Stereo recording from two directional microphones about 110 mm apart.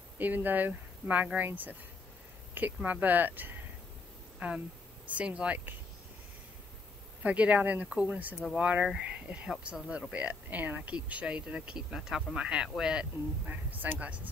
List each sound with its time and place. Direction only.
0.2 s speech: 15° right (ahead or behind)
7.2 s speech: 10° right (ahead or behind)
13.5 s speech: 15° right (ahead or behind)